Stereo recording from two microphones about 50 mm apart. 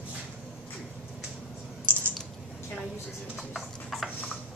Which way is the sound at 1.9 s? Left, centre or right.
Right.